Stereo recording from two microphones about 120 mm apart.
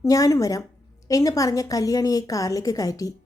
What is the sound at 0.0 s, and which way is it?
A woman's voice, 30° left (ahead or behind).